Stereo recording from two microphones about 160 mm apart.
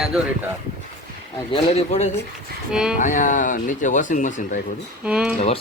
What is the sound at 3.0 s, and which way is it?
Speech, 55° left (ahead or behind).